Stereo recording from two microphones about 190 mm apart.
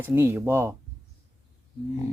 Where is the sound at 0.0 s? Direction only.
10° right (ahead or behind).